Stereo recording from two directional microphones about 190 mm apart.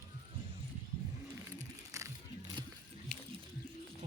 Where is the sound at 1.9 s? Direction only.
15° right (ahead or behind).